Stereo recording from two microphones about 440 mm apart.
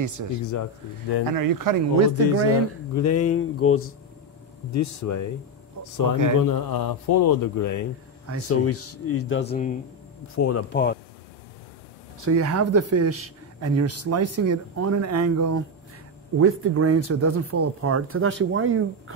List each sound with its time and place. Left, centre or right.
0.0 s speech: right
2.9 s speech: left
6.3 s speech: left
9.5 s speech: centre
10.3 s speech: left
10.7 s speech: left
12.2 s speech: right